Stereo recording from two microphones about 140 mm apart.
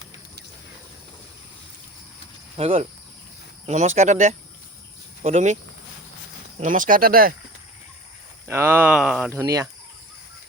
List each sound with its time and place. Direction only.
2.6 s speech: 45° right (ahead or behind)
6.6 s speech: 70° right (ahead or behind); by 7.3 s 90° right
8.4 s speech: 15° right (ahead or behind)
9.3 s speech: 20° right (ahead or behind)